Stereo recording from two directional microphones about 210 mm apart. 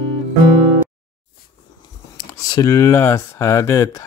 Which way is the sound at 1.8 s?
20° left (ahead or behind).